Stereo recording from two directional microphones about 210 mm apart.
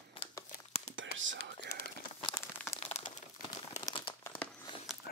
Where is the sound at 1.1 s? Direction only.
65° right (ahead or behind).